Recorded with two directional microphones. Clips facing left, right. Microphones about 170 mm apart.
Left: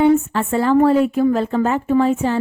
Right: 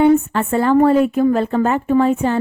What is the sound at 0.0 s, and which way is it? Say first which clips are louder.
A woman's voice: right 1 dB; 55° right (ahead or behind).